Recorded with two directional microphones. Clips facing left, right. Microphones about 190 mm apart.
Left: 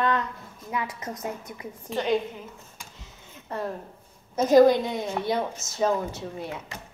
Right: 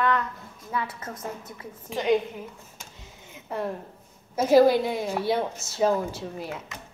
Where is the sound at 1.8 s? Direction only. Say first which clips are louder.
Right 2 dB; 5° right (ahead or behind).